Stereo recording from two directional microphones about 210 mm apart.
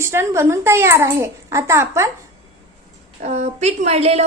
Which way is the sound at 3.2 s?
35° right (ahead or behind).